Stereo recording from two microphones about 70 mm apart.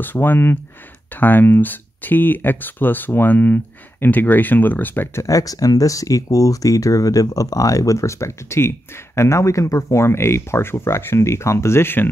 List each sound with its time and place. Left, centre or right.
0.0 s speech: left
5.2 s speech: left